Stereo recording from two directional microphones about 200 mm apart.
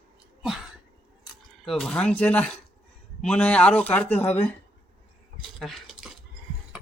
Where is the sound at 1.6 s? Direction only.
Centre (ahead or behind).